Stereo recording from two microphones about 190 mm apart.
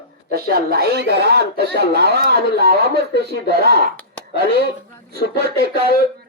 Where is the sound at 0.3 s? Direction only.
55° right (ahead or behind).